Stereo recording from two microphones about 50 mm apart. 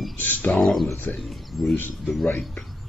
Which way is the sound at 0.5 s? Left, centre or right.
Centre.